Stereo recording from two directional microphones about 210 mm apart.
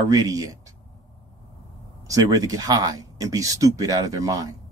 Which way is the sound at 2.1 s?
15° right (ahead or behind).